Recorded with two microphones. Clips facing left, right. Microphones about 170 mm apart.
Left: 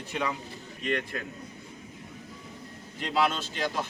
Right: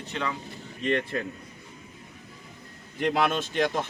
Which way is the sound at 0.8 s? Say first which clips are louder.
Right 4 dB; 30° right (ahead or behind).